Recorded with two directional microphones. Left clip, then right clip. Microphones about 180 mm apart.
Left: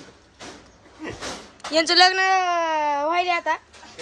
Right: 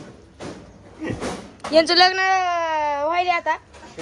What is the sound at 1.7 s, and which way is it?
Speech, 10° left (ahead or behind).